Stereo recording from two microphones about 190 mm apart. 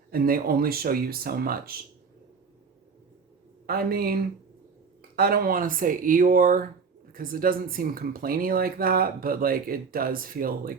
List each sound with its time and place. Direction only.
0.1 s speech: 50° right (ahead or behind)
3.7 s speech: 50° right (ahead or behind)